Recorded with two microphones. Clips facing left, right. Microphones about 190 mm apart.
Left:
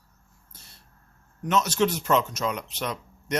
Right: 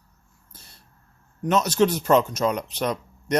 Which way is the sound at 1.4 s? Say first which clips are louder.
Right 3 dB; 35° right (ahead or behind).